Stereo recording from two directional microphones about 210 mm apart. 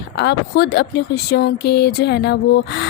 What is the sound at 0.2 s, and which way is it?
Speech, 50° left (ahead or behind).